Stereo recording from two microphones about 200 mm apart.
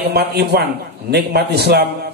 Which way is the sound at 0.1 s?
50° right (ahead or behind).